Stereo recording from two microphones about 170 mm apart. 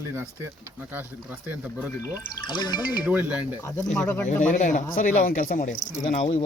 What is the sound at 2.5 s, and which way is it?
Speech, 25° left (ahead or behind).